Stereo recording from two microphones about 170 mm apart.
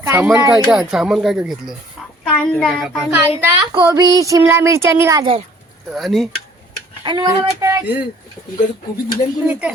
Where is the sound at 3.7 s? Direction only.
25° right (ahead or behind).